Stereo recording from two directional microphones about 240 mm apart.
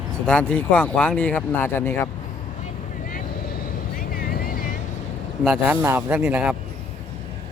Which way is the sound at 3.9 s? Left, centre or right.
Left.